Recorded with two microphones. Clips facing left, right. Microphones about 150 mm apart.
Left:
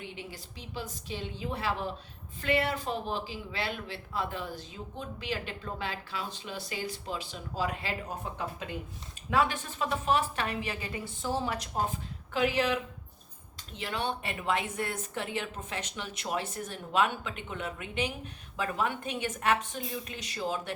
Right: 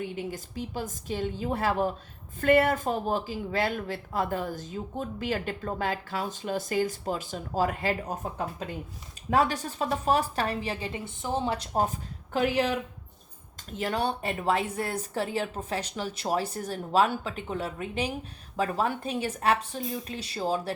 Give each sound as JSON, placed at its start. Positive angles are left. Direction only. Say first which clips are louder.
{"t": 0.0, "sound": "speech", "louder": "right 9 dB", "side_deg": -45}